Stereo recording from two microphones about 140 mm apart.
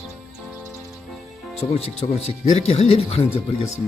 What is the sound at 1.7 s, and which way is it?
Speech, 45° left (ahead or behind).